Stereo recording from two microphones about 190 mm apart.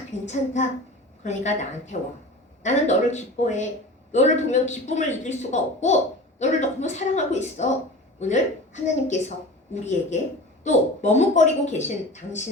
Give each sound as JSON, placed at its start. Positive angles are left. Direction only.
{"t": 0.1, "sound": "speech", "side_deg": 35}